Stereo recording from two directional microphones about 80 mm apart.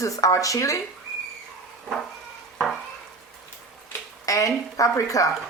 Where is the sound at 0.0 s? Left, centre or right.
Left.